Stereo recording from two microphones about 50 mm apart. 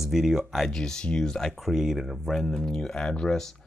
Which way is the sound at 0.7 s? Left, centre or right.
Centre.